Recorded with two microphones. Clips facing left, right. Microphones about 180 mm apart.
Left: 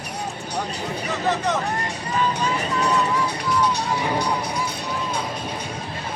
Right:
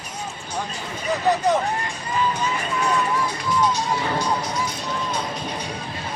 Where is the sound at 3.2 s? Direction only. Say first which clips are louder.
Even; 65° left (ahead or behind).